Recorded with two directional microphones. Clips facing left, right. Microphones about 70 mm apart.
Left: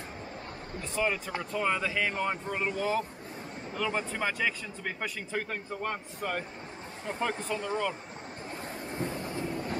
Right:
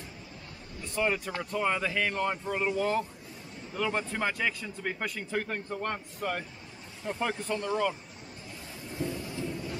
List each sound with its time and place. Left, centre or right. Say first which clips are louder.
0.9 s speech: right 1 dB; centre
8.8 s train: right 1 dB; left